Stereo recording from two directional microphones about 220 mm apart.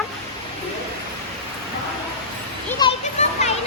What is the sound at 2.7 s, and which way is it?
Children playing, 20° left (ahead or behind).